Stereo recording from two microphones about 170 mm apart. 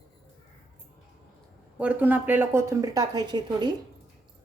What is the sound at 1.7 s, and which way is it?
Speech, 10° right (ahead or behind).